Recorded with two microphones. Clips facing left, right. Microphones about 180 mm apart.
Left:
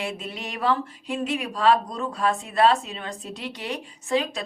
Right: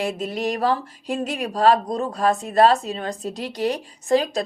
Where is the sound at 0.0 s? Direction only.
40° right (ahead or behind).